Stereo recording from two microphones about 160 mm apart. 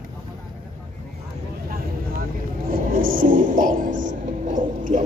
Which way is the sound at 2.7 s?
60° right (ahead or behind).